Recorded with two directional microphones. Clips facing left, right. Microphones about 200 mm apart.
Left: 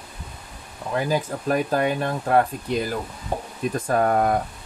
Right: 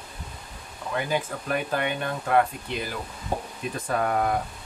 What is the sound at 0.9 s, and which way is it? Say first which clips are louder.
Speech: left 4 dB; 35° left (ahead or behind).